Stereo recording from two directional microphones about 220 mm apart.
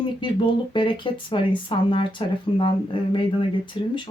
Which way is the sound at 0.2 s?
20° left (ahead or behind).